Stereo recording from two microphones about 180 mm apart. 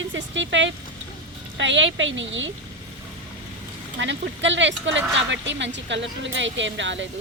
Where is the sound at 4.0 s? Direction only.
90° right.